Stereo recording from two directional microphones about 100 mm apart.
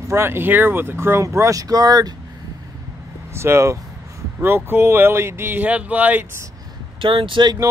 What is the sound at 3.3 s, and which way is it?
Speech, 25° right (ahead or behind).